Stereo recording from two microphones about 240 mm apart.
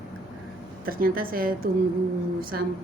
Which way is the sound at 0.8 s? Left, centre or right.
Right.